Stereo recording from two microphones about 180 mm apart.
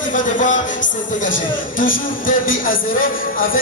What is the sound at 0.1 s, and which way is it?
Music, 45° left (ahead or behind).